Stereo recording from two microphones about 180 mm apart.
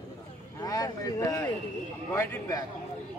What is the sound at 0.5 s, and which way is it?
Speech, 20° left (ahead or behind).